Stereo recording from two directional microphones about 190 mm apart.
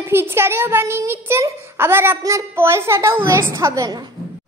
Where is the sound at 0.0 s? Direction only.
10° right (ahead or behind).